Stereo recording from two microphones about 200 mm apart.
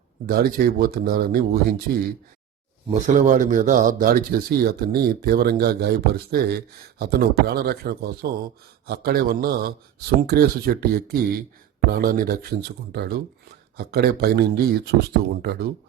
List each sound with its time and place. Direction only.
0.3 s a man's voice: 50° right (ahead or behind)
2.9 s a man's voice: 35° right (ahead or behind)